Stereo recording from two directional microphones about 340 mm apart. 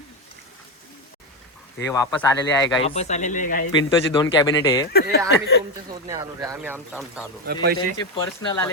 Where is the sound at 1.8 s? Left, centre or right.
Centre.